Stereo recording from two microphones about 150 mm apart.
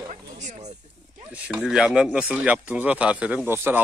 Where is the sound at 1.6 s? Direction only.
5° right (ahead or behind).